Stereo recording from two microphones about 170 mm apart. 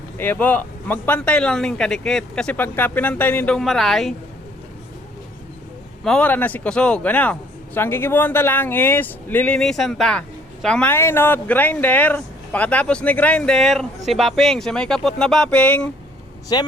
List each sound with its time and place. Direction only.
0.2 s a man's voice: 10° left (ahead or behind)
6.1 s a man's voice: 10° left (ahead or behind)
16.5 s a woman's voice: 25° left (ahead or behind)